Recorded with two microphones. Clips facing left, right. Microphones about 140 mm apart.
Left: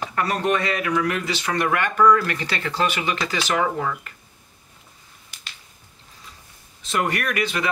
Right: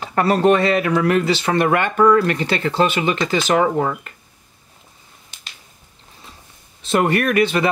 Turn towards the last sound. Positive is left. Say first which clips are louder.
# right 8 dB
turn(degrees=-30)  # may be behind; listen again after turning